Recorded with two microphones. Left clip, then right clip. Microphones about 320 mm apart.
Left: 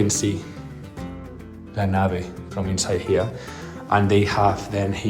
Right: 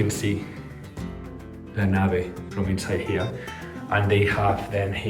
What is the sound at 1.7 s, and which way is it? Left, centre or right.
Speech, centre.